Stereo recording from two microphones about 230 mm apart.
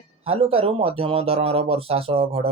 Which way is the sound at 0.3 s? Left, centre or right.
Right.